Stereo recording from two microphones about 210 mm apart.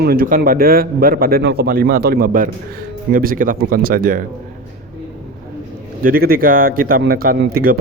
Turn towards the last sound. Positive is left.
turn(degrees=-45)  # may be behind; listen again after turning